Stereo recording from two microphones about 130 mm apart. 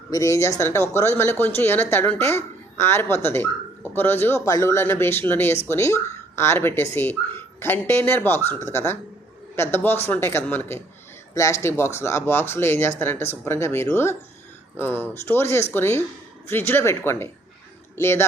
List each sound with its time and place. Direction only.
0.1 s speech: 25° left (ahead or behind)